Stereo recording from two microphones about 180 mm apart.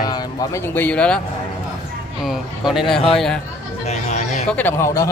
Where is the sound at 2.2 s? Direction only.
Centre (ahead or behind).